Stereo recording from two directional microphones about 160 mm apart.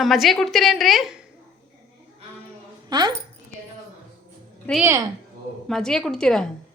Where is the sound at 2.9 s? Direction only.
25° right (ahead or behind).